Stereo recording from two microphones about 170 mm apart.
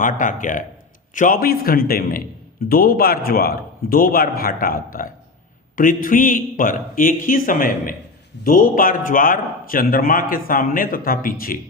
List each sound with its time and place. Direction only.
0.0 s a man's voice: 50° left (ahead or behind)